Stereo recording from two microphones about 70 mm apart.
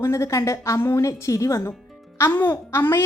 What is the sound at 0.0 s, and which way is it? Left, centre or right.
A woman's voice, left.